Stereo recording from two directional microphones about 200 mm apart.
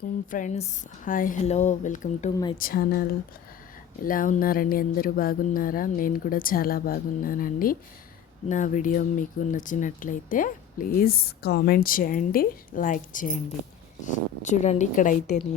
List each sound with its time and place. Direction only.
0.3 s a woman's voice: 40° left (ahead or behind)